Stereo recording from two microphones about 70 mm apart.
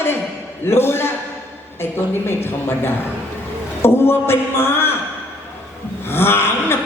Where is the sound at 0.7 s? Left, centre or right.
Left.